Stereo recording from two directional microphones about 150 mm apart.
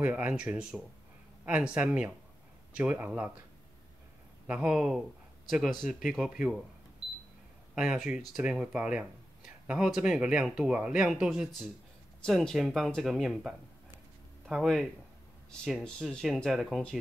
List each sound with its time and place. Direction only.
0.0 s speech: 10° right (ahead or behind)
4.5 s speech: 5° right (ahead or behind)
7.7 s speech: 5° right (ahead or behind)